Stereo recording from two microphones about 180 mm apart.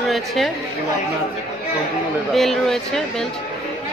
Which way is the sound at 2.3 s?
Centre (ahead or behind).